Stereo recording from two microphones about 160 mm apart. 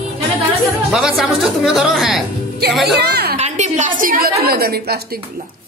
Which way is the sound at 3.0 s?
80° right.